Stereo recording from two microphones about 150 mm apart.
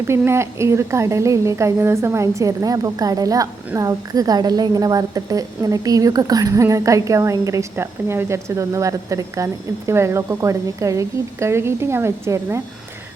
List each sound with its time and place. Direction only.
0.1 s a woman's voice: 20° right (ahead or behind)